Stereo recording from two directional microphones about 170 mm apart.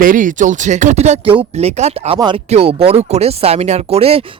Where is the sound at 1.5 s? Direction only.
40° right (ahead or behind).